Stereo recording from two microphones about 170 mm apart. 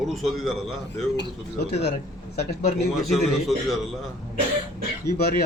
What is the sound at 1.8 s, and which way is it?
Speech, 70° left (ahead or behind).